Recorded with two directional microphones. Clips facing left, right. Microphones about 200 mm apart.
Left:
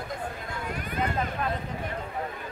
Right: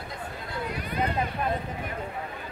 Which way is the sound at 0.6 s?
45° left (ahead or behind).